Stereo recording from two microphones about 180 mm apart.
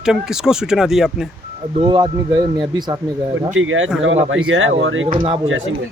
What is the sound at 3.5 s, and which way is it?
Speech, 90° right.